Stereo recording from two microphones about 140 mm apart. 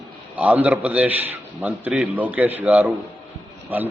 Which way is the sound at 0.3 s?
10° right (ahead or behind).